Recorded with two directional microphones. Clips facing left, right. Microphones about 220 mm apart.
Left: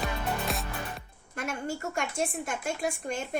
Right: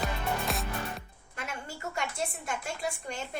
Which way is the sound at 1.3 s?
45° left (ahead or behind).